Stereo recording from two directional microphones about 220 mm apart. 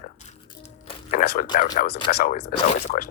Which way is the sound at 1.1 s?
40° left (ahead or behind).